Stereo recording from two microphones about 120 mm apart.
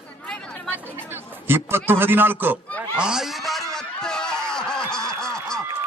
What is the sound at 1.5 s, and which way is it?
Speech, 20° right (ahead or behind).